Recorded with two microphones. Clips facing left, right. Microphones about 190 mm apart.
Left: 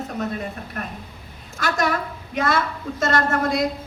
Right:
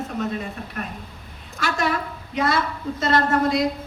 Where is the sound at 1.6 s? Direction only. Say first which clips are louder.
Left 1 dB; 45° left (ahead or behind).